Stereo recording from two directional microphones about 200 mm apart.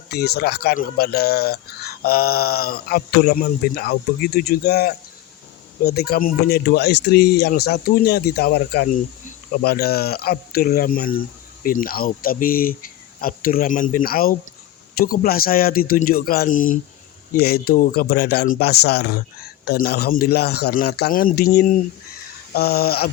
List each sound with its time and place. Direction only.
0.1 s speech: 55° left (ahead or behind)
22.5 s speech: 50° left (ahead or behind)